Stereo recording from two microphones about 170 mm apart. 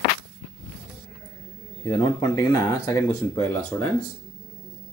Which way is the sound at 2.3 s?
20° left (ahead or behind).